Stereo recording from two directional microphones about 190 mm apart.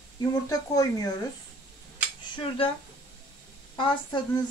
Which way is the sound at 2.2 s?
25° left (ahead or behind).